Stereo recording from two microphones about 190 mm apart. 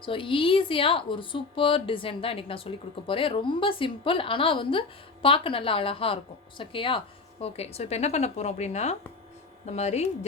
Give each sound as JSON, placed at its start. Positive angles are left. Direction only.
{"t": 0.0, "sound": "speech", "side_deg": 25}